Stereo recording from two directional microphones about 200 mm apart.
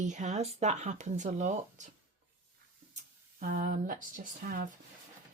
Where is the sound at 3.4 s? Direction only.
40° right (ahead or behind).